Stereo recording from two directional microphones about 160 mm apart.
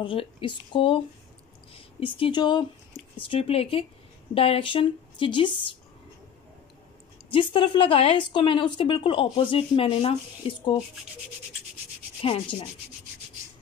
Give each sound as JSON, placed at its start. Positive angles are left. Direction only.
{"t": 0.0, "sound": "speech", "side_deg": 35}
{"t": 7.2, "sound": "speech", "side_deg": 35}
{"t": 12.2, "sound": "speech", "side_deg": 35}